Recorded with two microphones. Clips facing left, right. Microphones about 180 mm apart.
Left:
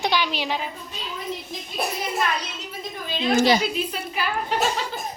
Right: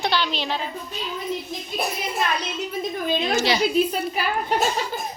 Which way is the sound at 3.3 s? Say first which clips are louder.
Left 7 dB; 50° left (ahead or behind).